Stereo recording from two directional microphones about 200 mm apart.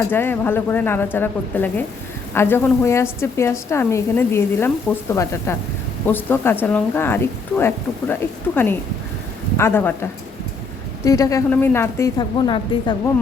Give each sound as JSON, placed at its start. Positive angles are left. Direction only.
{"t": 0.1, "sound": "speech", "side_deg": 10}